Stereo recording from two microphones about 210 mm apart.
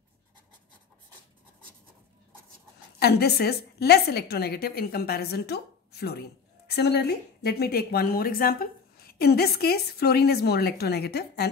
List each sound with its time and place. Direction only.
3.0 s a woman's voice: 50° left (ahead or behind)